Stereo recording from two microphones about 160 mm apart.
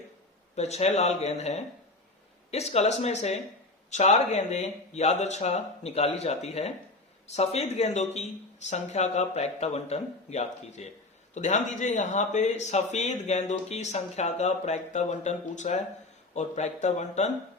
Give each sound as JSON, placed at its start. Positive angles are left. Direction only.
{"t": 0.5, "sound": "speech", "side_deg": 45}